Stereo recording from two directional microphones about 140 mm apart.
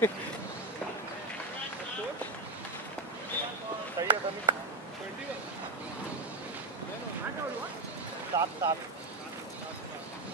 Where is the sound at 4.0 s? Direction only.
25° right (ahead or behind).